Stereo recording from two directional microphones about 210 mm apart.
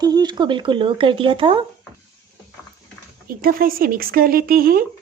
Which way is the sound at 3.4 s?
45° right (ahead or behind).